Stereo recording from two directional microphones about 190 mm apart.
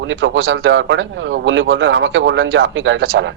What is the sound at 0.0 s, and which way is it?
A man's voice, 80° right.